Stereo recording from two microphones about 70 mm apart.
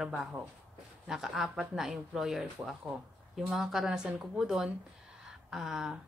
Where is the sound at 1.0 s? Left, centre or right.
Centre.